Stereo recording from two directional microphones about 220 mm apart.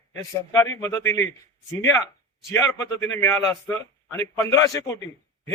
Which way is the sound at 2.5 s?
10° left (ahead or behind).